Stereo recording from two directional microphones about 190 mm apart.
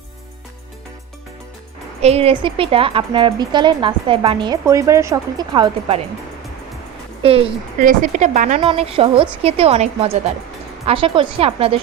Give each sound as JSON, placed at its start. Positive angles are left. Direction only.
{"t": 2.0, "sound": "speech", "side_deg": -35}
{"t": 7.2, "sound": "speech", "side_deg": -30}
{"t": 7.8, "sound": "a woman's voice", "side_deg": -45}